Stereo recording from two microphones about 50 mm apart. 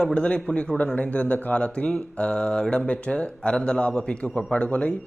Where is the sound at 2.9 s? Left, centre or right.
Left.